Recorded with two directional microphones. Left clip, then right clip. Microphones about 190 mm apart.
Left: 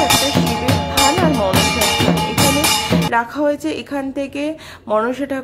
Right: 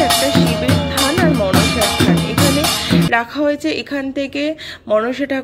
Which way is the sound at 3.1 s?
10° right (ahead or behind).